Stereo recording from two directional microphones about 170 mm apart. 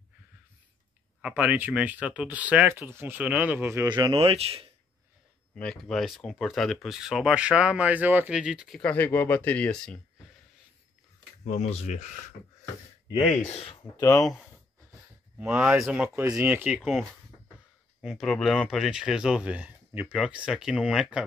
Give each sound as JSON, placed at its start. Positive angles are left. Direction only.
{"t": 1.2, "sound": "speech", "side_deg": -10}
{"t": 3.9, "sound": "speech", "side_deg": -20}
{"t": 4.2, "sound": "speech", "side_deg": -35}
{"t": 5.6, "sound": "speech", "side_deg": 5}
{"t": 11.4, "sound": "speech", "side_deg": 40}
{"t": 13.5, "sound": "speech", "side_deg": 35}
{"t": 13.9, "sound": "speech", "side_deg": 20}
{"t": 14.2, "sound": "speech", "side_deg": 0}
{"t": 18.0, "sound": "speech", "side_deg": 0}